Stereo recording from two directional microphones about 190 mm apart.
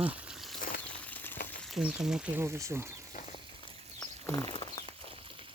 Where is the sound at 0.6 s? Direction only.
50° left (ahead or behind).